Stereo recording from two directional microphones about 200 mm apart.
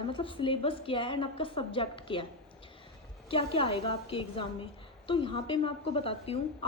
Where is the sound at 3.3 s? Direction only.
25° left (ahead or behind).